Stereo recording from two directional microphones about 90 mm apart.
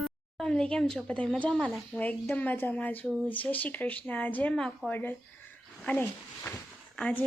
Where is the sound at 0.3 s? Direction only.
10° left (ahead or behind).